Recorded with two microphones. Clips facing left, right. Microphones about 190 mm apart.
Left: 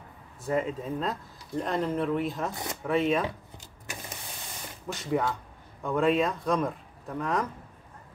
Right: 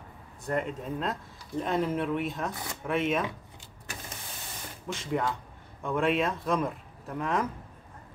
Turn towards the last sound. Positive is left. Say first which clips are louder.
# even
turn(degrees=0)  # may be behind; listen again after turning